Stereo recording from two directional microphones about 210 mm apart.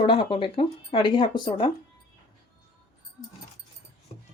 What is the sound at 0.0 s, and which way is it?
Speech, 25° left (ahead or behind).